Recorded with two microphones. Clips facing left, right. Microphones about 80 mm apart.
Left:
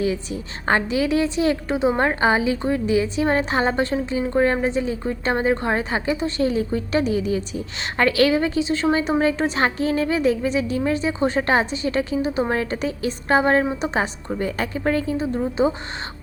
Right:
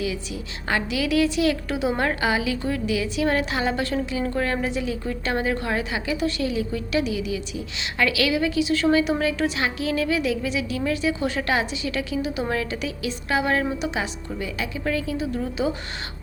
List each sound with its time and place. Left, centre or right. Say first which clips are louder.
0.0 s a woman's voice: left 5 dB; left